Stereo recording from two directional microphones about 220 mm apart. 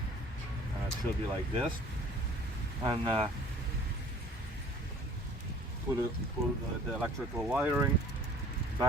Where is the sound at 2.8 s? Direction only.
20° right (ahead or behind).